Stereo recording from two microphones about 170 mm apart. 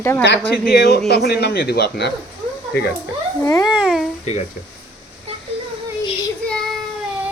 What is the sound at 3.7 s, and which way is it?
Babbling, 5° right (ahead or behind).